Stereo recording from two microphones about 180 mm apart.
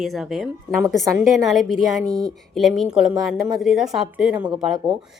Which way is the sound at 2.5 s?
Centre (ahead or behind).